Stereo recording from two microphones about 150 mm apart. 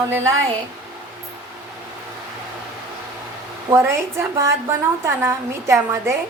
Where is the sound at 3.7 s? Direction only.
15° right (ahead or behind).